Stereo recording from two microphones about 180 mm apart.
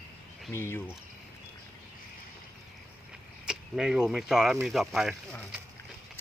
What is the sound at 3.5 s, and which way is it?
Speech, 5° right (ahead or behind).